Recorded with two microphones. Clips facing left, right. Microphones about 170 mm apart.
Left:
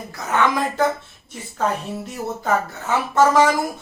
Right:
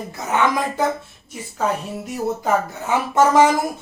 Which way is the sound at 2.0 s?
15° right (ahead or behind).